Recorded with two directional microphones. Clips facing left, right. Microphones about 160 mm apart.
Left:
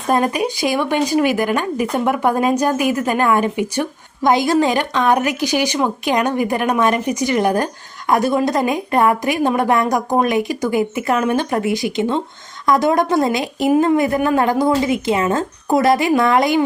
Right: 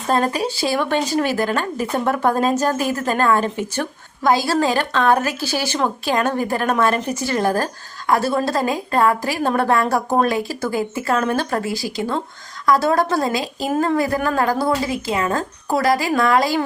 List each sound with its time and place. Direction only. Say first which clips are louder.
0.1 s a woman's voice: left 2 dB; 15° left (ahead or behind)